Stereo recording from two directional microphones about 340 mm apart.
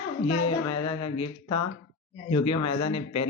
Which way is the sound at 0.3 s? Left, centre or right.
Left.